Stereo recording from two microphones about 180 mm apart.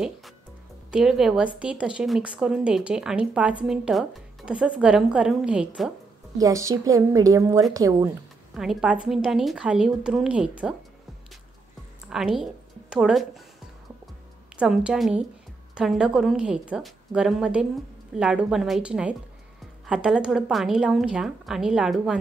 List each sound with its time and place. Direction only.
0.9 s speech: 5° right (ahead or behind)
6.3 s a woman's voice: 20° right (ahead or behind)
8.5 s speech: 5° right (ahead or behind)
12.1 s speech: centre (ahead or behind)
14.6 s speech: 5° right (ahead or behind)